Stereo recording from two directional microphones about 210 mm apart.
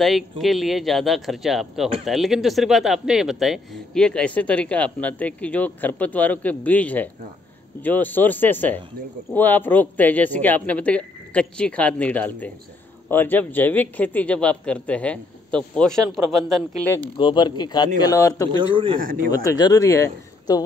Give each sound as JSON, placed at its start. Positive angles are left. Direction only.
{"t": 0.0, "sound": "a man's voice", "side_deg": 0}
{"t": 17.2, "sound": "speech", "side_deg": 20}
{"t": 18.6, "sound": "a man's voice", "side_deg": -25}
{"t": 18.9, "sound": "speech", "side_deg": -40}
{"t": 19.3, "sound": "a man's voice", "side_deg": 15}